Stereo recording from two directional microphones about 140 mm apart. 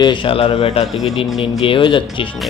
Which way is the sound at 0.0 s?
35° left (ahead or behind).